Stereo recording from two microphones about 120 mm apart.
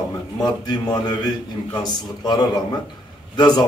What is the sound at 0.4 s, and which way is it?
Speech, 35° left (ahead or behind).